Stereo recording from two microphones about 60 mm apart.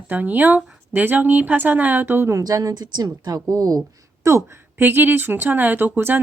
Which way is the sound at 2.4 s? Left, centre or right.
Right.